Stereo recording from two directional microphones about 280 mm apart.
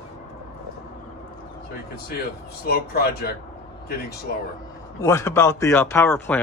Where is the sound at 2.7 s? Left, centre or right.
Left.